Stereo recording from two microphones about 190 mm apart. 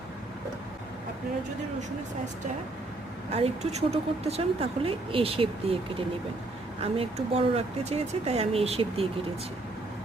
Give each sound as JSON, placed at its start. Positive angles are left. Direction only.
{"t": 3.3, "sound": "speech", "side_deg": -35}
{"t": 6.9, "sound": "speech", "side_deg": -30}